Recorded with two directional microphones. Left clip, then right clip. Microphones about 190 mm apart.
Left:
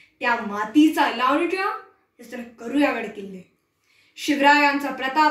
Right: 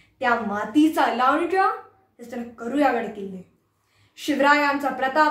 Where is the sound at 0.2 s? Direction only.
15° right (ahead or behind).